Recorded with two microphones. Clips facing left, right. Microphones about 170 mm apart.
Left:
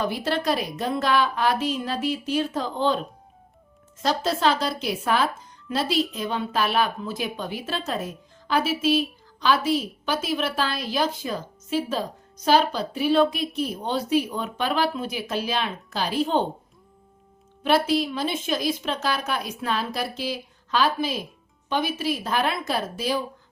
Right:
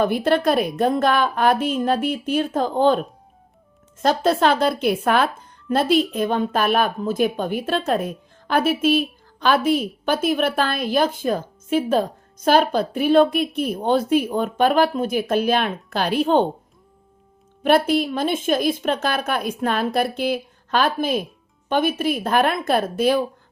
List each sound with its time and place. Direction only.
0.0 s speech: 55° right (ahead or behind)
17.6 s a woman's voice: 55° right (ahead or behind)